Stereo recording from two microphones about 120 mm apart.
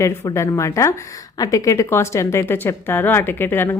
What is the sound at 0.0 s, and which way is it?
Speech, 25° left (ahead or behind).